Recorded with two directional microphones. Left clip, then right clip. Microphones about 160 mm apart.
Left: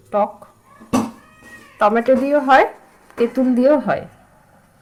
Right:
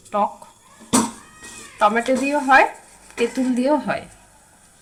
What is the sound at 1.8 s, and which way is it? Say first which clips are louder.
Speech: left 3 dB; 45° left (ahead or behind).